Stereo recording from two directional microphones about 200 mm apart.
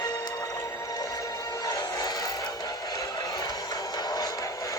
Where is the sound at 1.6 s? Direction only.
20° left (ahead or behind).